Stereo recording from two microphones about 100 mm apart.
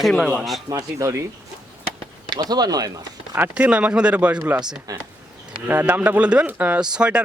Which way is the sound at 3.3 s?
15° right (ahead or behind).